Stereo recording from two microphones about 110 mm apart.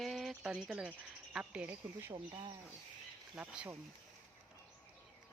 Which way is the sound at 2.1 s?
45° right (ahead or behind).